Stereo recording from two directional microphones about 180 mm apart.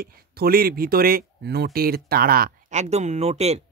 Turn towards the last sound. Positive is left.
turn(degrees=-35)  # may be behind; listen again after turning